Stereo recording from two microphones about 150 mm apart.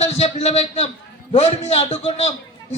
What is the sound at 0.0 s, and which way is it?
A man's voice, 45° left (ahead or behind).